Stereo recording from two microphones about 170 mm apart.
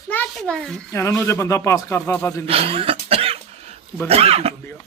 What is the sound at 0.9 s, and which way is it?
Speech, 15° left (ahead or behind).